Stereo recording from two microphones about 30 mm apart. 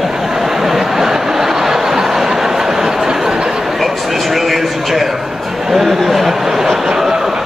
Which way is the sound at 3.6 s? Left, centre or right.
Centre.